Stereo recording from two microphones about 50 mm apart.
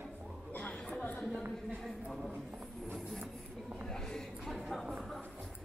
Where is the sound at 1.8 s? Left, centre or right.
Centre.